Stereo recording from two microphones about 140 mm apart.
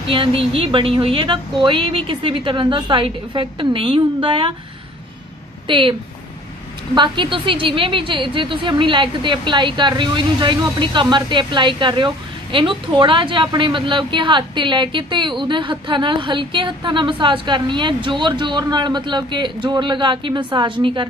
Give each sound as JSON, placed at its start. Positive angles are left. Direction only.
{"t": 0.0, "sound": "a woman's voice", "side_deg": -40}
{"t": 5.7, "sound": "a woman's voice", "side_deg": -35}
{"t": 7.0, "sound": "a woman's voice", "side_deg": -35}